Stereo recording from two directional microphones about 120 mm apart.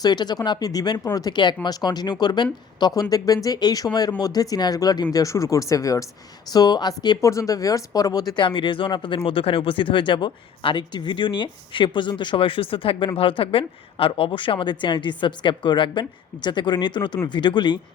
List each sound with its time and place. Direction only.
0.0 s speech: 35° left (ahead or behind)
8.4 s speech: 45° left (ahead or behind)